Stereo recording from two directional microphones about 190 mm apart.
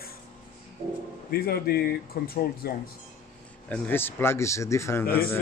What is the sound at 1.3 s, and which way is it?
A man's voice, 55° left (ahead or behind).